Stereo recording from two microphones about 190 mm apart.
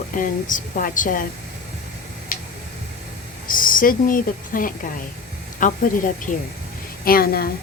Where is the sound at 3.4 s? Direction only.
45° left (ahead or behind).